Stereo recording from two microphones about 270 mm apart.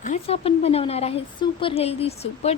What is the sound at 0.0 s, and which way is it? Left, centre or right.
Speech, left.